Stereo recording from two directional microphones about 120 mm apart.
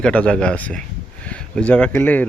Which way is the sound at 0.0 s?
10° left (ahead or behind).